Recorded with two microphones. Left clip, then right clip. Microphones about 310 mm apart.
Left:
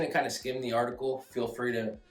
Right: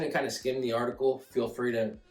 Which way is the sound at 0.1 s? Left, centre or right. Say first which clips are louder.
Even; centre.